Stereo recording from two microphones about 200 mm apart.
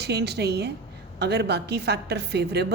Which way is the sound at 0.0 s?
55° right (ahead or behind).